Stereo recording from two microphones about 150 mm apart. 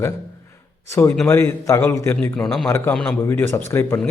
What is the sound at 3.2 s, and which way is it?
Speech, 15° left (ahead or behind).